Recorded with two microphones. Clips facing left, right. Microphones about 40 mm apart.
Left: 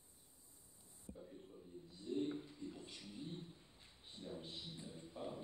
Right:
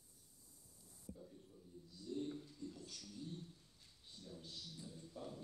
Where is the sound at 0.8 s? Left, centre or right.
Left.